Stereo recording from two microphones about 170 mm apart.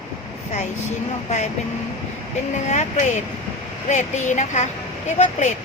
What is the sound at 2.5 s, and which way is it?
Speech, 45° left (ahead or behind).